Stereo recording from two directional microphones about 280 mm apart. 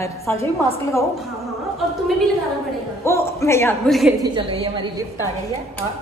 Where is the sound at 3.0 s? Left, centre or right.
Centre.